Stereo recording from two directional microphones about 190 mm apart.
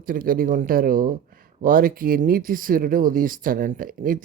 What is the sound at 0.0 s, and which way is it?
Speech, 50° right (ahead or behind).